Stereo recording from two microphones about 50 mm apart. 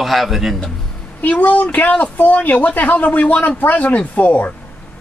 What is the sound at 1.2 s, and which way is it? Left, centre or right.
A woman's voice, left.